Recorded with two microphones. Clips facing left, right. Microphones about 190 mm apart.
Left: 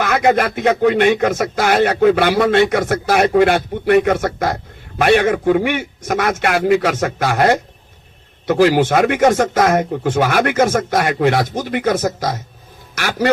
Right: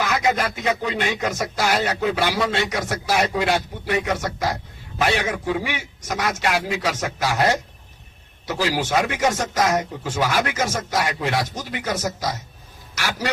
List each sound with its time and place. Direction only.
0.0 s speech: 55° left (ahead or behind)